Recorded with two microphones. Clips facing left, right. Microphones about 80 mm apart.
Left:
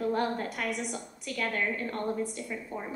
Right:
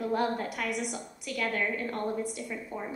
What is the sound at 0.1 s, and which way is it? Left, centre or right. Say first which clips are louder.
A woman's voice: right 1 dB; left.